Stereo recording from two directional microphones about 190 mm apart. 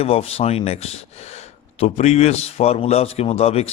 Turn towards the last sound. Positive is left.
turn(degrees=30)  # may be behind; listen again after turning